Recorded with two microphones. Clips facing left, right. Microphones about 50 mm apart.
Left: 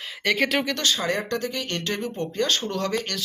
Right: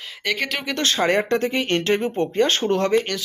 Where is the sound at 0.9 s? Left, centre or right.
Right.